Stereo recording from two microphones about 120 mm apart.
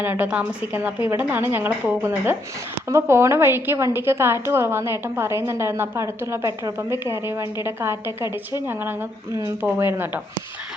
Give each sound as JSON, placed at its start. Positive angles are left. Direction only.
{"t": 0.0, "sound": "a woman's voice", "side_deg": -15}